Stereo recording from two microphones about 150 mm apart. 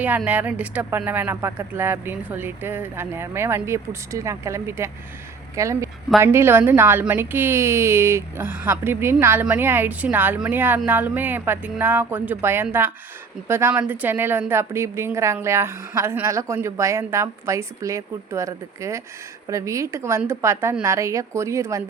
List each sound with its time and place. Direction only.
0.3 s a woman's voice: 10° right (ahead or behind)